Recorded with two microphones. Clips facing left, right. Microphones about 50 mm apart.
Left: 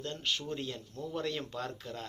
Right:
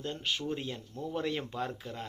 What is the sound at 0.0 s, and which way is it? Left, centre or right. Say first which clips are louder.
Speech: right 1 dB; centre.